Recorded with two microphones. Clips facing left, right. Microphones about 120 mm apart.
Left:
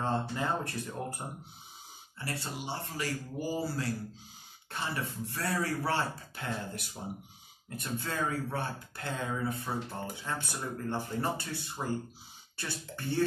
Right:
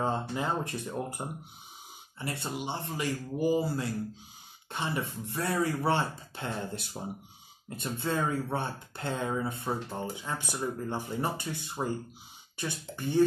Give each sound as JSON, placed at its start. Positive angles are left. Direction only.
{"t": 0.0, "sound": "speech", "side_deg": -20}